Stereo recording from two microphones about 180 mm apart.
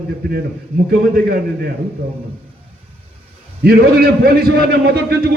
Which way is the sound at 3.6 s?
60° right (ahead or behind).